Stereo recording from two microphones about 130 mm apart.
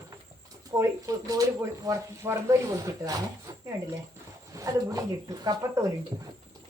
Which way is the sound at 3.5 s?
30° right (ahead or behind).